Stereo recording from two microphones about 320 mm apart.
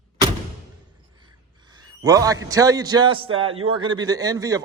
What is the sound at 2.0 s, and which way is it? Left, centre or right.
A man's voice, centre.